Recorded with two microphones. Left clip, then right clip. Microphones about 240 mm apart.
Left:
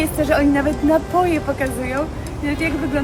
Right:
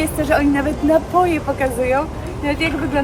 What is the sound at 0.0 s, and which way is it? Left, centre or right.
Speech, centre.